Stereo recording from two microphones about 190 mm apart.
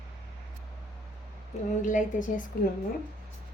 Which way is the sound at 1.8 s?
40° left (ahead or behind).